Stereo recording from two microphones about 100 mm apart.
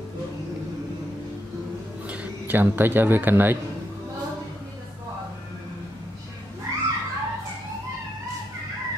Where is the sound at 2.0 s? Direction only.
15° right (ahead or behind).